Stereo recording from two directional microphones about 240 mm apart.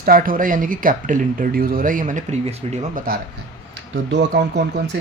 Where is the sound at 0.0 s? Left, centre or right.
Right.